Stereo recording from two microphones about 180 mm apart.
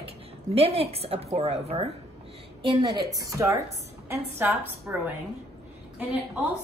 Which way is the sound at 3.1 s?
20° right (ahead or behind).